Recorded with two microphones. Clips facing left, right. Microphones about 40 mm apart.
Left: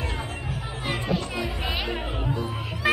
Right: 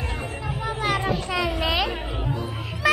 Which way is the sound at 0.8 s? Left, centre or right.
Right.